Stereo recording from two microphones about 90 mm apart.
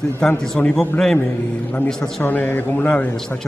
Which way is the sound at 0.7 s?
5° left (ahead or behind).